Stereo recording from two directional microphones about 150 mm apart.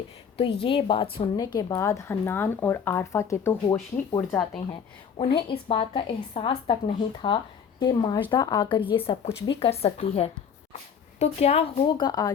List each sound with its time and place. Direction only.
0.3 s speech: 35° left (ahead or behind)
1.4 s speech: 25° left (ahead or behind)
4.3 s speech: 5° left (ahead or behind)
5.1 s speech: 35° left (ahead or behind)